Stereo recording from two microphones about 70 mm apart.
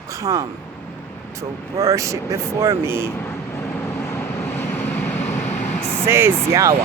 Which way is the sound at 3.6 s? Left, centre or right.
Left.